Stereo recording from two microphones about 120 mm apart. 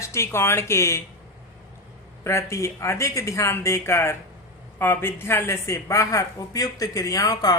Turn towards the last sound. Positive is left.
turn(degrees=30)  # may be behind; listen again after turning